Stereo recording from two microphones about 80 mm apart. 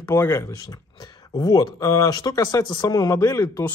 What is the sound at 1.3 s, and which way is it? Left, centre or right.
Speech, left.